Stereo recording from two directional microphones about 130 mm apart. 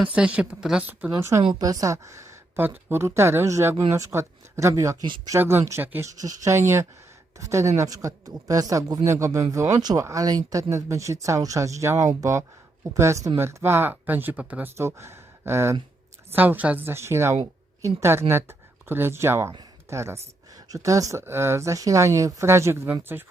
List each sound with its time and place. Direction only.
0.0 s speech: 10° right (ahead or behind)
1.4 s speech: 40° right (ahead or behind)
1.6 s speech: 25° right (ahead or behind)
5.0 s speech: 35° right (ahead or behind)
5.3 s speech: 20° right (ahead or behind)